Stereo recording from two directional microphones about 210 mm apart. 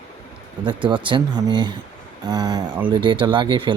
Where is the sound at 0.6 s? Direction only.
20° right (ahead or behind).